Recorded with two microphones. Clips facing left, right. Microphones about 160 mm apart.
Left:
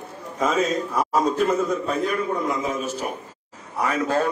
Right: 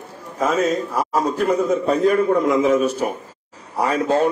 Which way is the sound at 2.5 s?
90° right.